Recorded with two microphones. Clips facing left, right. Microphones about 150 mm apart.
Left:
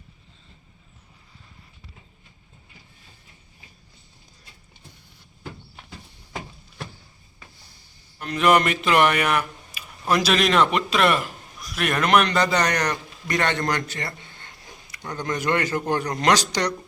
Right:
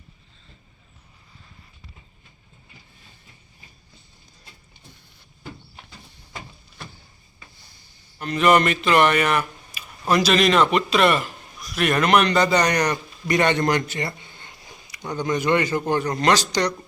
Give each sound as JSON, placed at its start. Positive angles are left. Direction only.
{"t": 8.2, "sound": "speech", "side_deg": 0}
{"t": 13.9, "sound": "a sound", "side_deg": -20}
{"t": 15.0, "sound": "speech", "side_deg": -10}